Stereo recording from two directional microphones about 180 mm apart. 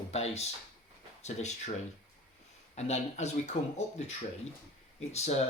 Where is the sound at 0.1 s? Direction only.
35° left (ahead or behind).